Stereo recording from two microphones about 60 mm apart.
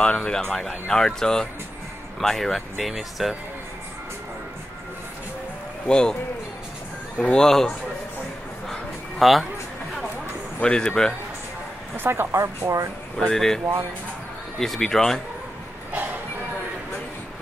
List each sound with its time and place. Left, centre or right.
0.0 s speech: centre
5.9 s speech: centre
7.2 s speech: centre
9.2 s speech: centre
10.6 s speech: centre
12.0 s speech: right
12.3 s speech: right
13.3 s speech: centre
14.6 s speech: centre